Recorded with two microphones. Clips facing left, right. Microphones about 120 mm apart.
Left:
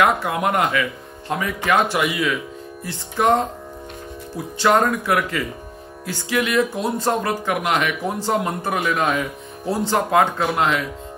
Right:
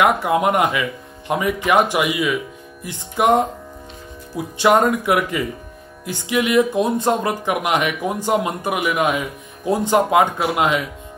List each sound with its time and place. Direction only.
0.0 s speech: 20° right (ahead or behind)